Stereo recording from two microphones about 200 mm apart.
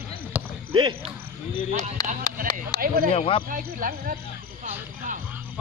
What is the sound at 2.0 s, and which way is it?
Speech, 15° left (ahead or behind).